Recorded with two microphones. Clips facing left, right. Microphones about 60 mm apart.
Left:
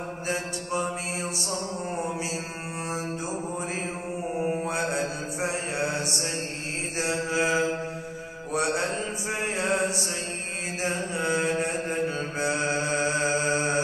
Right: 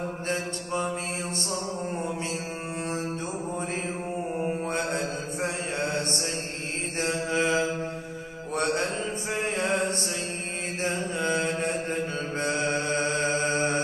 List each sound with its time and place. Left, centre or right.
4.4 s mantra: centre
7.2 s mantra: centre
11.0 s mantra: centre